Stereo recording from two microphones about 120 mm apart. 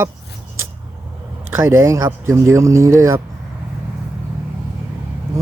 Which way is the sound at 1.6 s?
25° right (ahead or behind).